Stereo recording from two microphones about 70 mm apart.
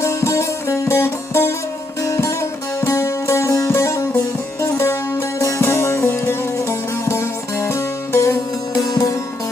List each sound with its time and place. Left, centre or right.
0.0 s music: left
5.5 s sitar: left
8.9 s music: left